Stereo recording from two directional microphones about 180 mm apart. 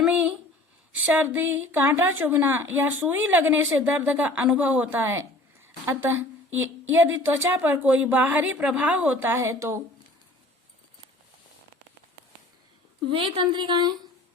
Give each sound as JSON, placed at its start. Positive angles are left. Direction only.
{"t": 0.0, "sound": "a sound", "side_deg": -10}
{"t": 0.9, "sound": "speech", "side_deg": -10}
{"t": 13.1, "sound": "speech", "side_deg": -30}